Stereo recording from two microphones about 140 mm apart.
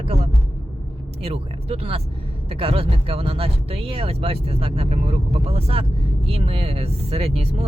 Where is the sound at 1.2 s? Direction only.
45° right (ahead or behind).